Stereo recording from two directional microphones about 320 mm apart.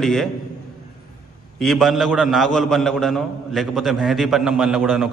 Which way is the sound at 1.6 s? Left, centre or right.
Centre.